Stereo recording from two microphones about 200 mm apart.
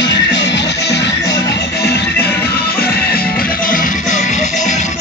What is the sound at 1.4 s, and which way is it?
Music, 55° left (ahead or behind).